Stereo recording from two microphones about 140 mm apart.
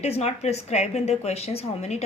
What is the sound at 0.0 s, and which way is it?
A woman's voice, 50° left (ahead or behind).